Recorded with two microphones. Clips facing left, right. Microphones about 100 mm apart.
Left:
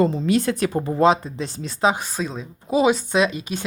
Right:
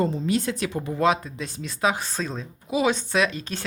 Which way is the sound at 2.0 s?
10° left (ahead or behind).